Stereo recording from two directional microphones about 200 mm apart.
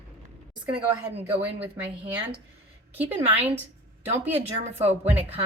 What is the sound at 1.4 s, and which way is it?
A woman's voice, 10° right (ahead or behind).